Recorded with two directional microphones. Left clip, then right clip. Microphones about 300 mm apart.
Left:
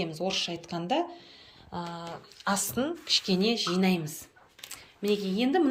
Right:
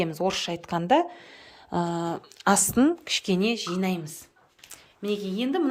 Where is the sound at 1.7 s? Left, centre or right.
Right.